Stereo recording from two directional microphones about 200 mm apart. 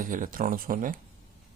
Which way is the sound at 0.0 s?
40° right (ahead or behind).